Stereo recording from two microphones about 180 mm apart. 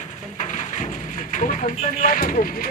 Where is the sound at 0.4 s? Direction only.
45° left (ahead or behind).